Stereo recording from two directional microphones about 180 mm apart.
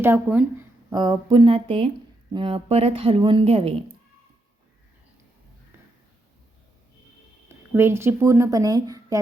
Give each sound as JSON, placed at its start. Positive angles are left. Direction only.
{"t": 0.0, "sound": "speech", "side_deg": -10}
{"t": 0.9, "sound": "speech", "side_deg": -25}
{"t": 7.4, "sound": "speech", "side_deg": -15}